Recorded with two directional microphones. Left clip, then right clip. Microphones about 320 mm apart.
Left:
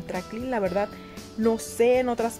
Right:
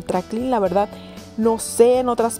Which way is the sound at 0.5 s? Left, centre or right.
Right.